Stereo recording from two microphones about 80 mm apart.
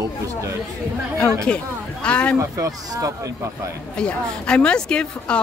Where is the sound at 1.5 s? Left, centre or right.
Centre.